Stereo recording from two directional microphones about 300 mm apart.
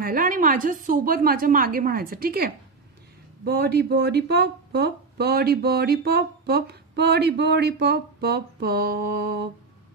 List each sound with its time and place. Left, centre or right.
0.0 s a woman's voice: right